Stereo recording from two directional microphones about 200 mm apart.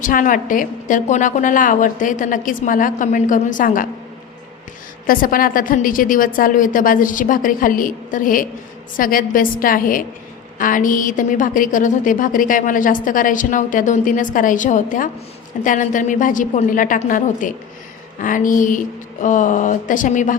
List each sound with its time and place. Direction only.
0.0 s a woman's voice: 40° left (ahead or behind)
5.0 s a woman's voice: 45° left (ahead or behind)